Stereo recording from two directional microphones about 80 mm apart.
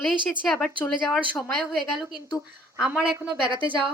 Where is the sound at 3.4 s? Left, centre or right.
Right.